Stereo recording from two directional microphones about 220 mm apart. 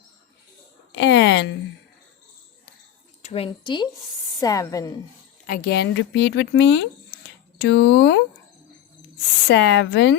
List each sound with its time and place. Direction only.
0.9 s speech: 55° left (ahead or behind)
3.2 s a woman's voice: 25° left (ahead or behind)
5.5 s speech: 45° left (ahead or behind)
9.5 s speech: 50° left (ahead or behind)